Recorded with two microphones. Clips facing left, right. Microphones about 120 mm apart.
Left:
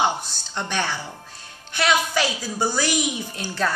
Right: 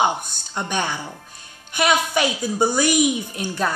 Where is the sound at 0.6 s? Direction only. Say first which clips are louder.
Right 2 dB; 15° right (ahead or behind).